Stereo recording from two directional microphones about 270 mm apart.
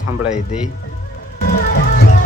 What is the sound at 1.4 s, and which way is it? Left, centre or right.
Music, left.